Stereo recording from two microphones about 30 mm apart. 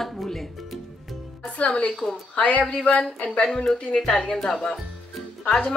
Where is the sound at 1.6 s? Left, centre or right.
Left.